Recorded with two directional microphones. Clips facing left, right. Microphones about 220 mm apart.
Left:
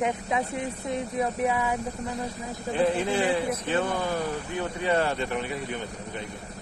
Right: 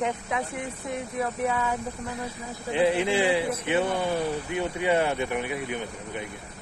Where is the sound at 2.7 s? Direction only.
10° right (ahead or behind).